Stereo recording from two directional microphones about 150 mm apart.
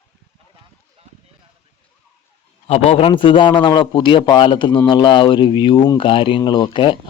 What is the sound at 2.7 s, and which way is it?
Speech, 45° left (ahead or behind).